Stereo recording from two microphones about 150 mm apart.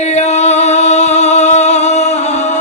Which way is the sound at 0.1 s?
50° left (ahead or behind).